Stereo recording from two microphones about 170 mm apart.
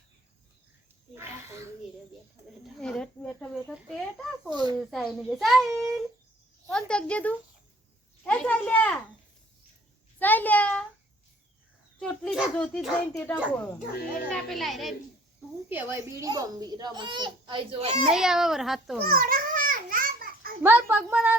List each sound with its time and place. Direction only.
1.1 s a sound: 15° right (ahead or behind)
2.8 s a sound: 5° left (ahead or behind)
4.4 s a sound: 25° right (ahead or behind)
4.8 s a child's voice: centre (ahead or behind)
6.7 s a child's voice: 5° left (ahead or behind)
10.2 s a child's voice: 10° left (ahead or behind)
11.9 s a child's voice: 5° left (ahead or behind)
15.7 s a child's voice: 15° right (ahead or behind); by 18.1 s 35° right (ahead or behind)
18.1 s a child's voice: 5° right (ahead or behind)
19.0 s children playing: 60° right (ahead or behind)
20.6 s a woman's voice: 10° right (ahead or behind)